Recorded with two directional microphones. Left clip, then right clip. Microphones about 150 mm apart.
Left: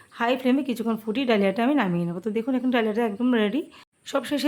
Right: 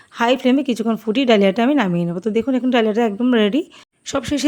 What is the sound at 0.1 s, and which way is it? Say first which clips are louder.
A woman's voice: right 7 dB; 40° right (ahead or behind).